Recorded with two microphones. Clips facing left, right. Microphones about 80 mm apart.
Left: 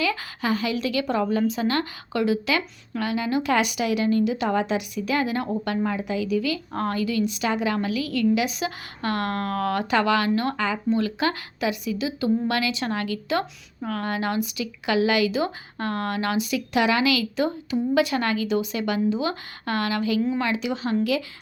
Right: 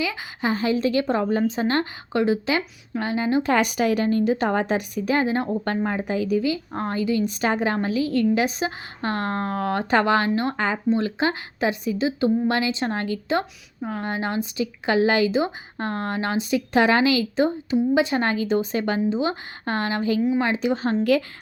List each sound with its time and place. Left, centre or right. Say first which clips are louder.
0.0 s a sound: even; centre
0.5 s a woman's voice: right 4 dB; right
6.4 s a woman's voice: right 1 dB; right